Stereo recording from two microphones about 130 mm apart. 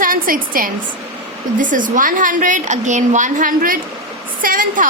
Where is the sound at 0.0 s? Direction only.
90° right.